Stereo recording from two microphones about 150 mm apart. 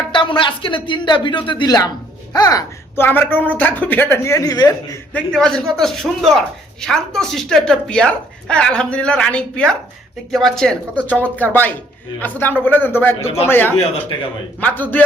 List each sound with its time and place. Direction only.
0.1 s speech: 35° left (ahead or behind)
5.1 s a woman's voice: 5° left (ahead or behind)